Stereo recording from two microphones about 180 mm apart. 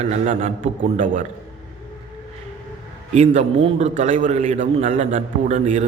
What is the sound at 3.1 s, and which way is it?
A man's voice, 35° right (ahead or behind).